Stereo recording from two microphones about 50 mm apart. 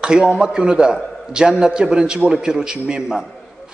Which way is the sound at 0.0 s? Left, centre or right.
Centre.